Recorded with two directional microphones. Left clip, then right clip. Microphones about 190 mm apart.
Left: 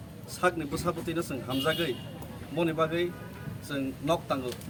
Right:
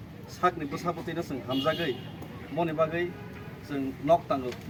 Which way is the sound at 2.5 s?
25° left (ahead or behind).